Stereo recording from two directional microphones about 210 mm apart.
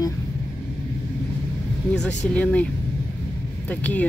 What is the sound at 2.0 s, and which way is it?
Speech, 5° left (ahead or behind).